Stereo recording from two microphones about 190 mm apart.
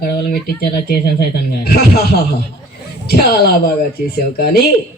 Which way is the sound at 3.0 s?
55° left (ahead or behind).